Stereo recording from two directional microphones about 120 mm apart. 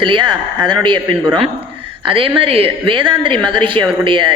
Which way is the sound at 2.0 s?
50° right (ahead or behind).